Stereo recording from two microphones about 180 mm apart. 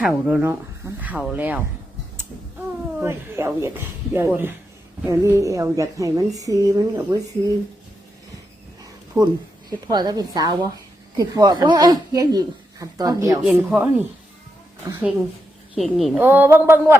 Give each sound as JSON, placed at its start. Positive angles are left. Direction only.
{"t": 0.0, "sound": "speech", "side_deg": -5}
{"t": 3.0, "sound": "speech", "side_deg": -15}
{"t": 8.8, "sound": "a woman's voice", "side_deg": -20}
{"t": 13.4, "sound": "speech", "side_deg": 0}
{"t": 14.8, "sound": "speech", "side_deg": -20}
{"t": 15.7, "sound": "speech", "side_deg": 0}
{"t": 16.1, "sound": "speech", "side_deg": -10}